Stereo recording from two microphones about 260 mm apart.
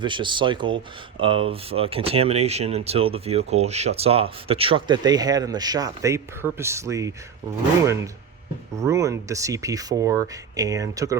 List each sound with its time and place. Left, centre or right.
0.0 s speech: centre
8.8 s speech: centre